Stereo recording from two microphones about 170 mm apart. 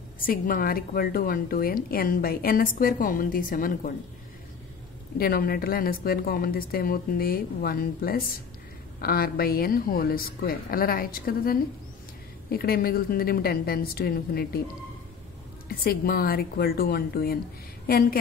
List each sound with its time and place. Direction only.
0.2 s a woman's voice: 55° left (ahead or behind)
5.1 s a woman's voice: 60° left (ahead or behind)
15.7 s a woman's voice: 60° left (ahead or behind)